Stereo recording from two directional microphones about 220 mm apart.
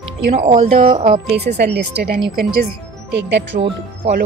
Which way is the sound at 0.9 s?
20° right (ahead or behind).